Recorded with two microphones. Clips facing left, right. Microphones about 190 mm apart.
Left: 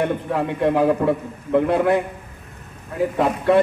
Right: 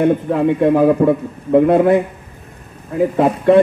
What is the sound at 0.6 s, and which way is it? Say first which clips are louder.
A man's voice: right 4 dB; 50° right (ahead or behind).